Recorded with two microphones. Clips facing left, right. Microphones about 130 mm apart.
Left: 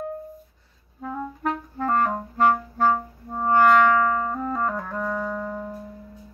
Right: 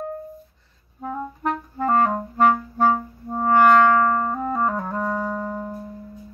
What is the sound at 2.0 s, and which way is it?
Clarinet, 15° right (ahead or behind).